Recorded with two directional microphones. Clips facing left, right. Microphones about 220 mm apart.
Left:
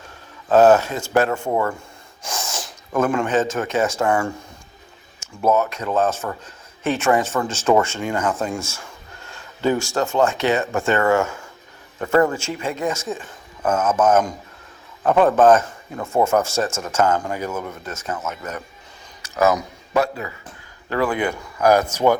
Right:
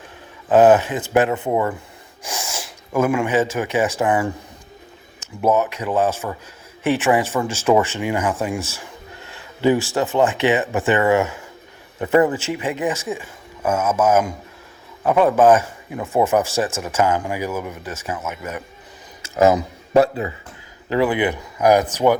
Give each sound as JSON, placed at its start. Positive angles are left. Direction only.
{"t": 0.4, "sound": "speech", "side_deg": -15}
{"t": 19.4, "sound": "speech", "side_deg": -30}